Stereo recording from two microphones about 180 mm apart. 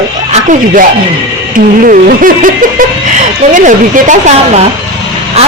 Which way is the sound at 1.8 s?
50° right (ahead or behind).